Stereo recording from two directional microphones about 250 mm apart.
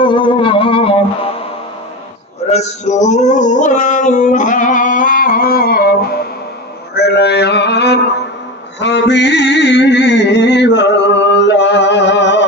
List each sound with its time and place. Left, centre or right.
0.0 s music: centre
2.5 s male singing: left
6.9 s male singing: left
8.8 s music: left